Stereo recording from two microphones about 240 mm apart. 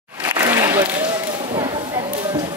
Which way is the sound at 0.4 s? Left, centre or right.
Centre.